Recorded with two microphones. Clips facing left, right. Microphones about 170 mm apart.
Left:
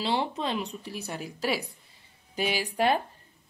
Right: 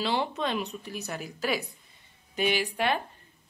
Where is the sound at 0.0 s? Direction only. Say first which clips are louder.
Even; 30° left (ahead or behind).